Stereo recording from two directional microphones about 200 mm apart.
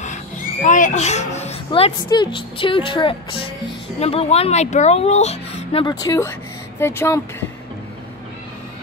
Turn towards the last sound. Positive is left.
turn(degrees=15)  # may be behind; listen again after turning